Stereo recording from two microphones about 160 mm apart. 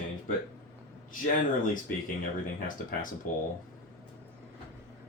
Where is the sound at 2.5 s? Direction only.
60° left (ahead or behind).